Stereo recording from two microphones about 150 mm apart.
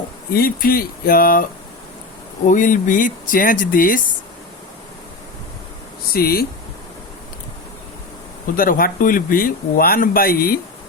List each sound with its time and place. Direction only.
0.3 s speech: 80° left
2.5 s speech: 60° left (ahead or behind)
6.1 s speech: 90° left
8.5 s speech: 70° left (ahead or behind)